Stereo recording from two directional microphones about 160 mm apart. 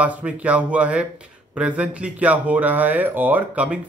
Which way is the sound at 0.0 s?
10° right (ahead or behind).